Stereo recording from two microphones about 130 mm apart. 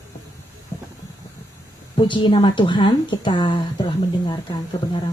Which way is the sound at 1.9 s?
40° left (ahead or behind).